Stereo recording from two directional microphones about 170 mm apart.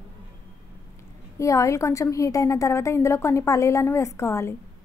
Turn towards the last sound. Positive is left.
turn(degrees=15)  # may be behind; listen again after turning